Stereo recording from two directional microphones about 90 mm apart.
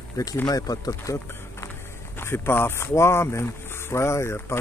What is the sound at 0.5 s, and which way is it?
Speech, 45° left (ahead or behind).